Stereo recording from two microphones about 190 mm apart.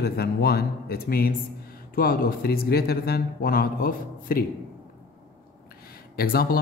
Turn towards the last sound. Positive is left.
turn(degrees=50)  # may be behind; listen again after turning